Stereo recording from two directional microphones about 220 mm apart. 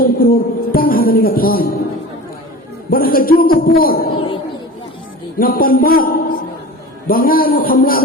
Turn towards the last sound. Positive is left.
turn(degrees=40)  # may be behind; listen again after turning